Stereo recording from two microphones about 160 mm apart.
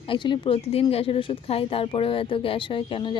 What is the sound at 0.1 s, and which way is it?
A woman's voice, 30° left (ahead or behind).